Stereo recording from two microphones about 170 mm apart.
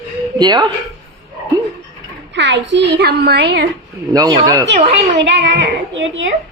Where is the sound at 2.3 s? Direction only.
90° right; by 3.6 s 70° right (ahead or behind).